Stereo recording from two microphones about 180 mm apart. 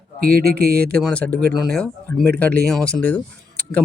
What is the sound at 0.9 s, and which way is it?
A man's voice, 5° left (ahead or behind).